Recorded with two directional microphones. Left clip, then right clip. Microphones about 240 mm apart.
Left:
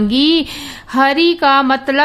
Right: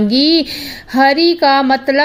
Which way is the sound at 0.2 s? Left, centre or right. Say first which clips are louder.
Right 1 dB; left.